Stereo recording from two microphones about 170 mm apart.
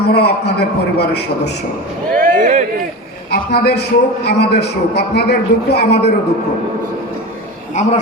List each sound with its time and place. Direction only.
0.0 s a man's voice: 75° left (ahead or behind)
2.1 s a sound: 50° right (ahead or behind)
3.3 s a man's voice: 70° left (ahead or behind)